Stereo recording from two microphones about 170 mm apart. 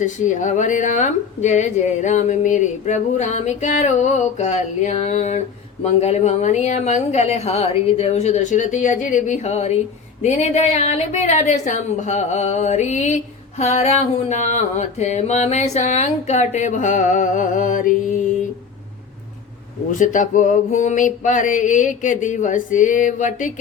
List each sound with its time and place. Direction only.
0.0 s speech: 45° left (ahead or behind)
19.9 s speech: 50° left (ahead or behind)